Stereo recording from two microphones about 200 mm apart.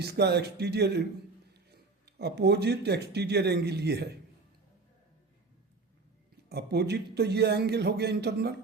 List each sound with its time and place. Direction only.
0.0 s speech: 55° right (ahead or behind)
6.5 s speech: 55° right (ahead or behind)